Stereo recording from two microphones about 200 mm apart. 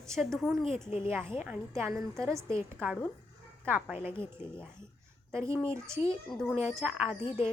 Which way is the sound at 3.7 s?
10° right (ahead or behind).